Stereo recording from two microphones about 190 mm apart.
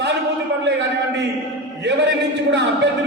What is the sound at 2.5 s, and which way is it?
Speech, 65° right (ahead or behind).